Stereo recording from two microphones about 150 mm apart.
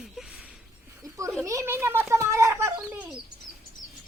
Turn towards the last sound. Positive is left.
turn(degrees=-10)  # may be behind; listen again after turning